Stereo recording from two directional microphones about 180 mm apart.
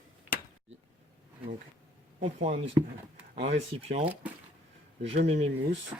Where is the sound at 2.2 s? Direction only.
40° right (ahead or behind).